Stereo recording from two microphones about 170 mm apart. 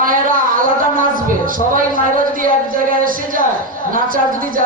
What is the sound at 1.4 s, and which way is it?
Speech, 55° right (ahead or behind).